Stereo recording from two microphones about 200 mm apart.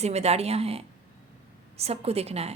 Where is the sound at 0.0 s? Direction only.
35° right (ahead or behind).